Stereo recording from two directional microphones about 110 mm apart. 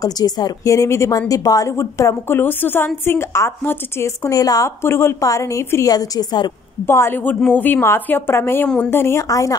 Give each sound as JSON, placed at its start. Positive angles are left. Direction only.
{"t": 0.0, "sound": "a woman's voice", "side_deg": 35}
{"t": 6.9, "sound": "a woman's voice", "side_deg": 20}
{"t": 8.6, "sound": "speech", "side_deg": 5}
{"t": 8.9, "sound": "a woman's voice", "side_deg": 25}